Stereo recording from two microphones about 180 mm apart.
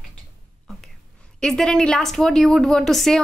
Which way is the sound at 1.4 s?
5° left (ahead or behind).